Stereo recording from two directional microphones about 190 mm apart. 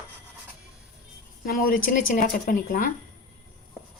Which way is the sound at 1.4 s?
50° left (ahead or behind).